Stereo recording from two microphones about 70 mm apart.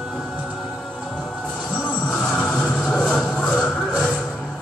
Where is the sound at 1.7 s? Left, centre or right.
Centre.